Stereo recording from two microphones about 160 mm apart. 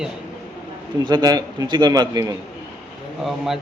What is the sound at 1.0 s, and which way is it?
A man's voice, 25° right (ahead or behind).